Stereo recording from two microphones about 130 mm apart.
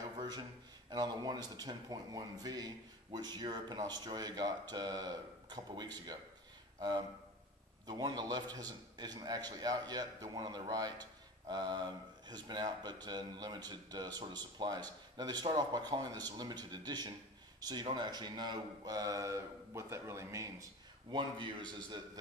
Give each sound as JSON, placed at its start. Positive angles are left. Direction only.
{"t": 0.2, "sound": "a man's voice", "side_deg": -35}
{"t": 21.1, "sound": "a man's voice", "side_deg": -35}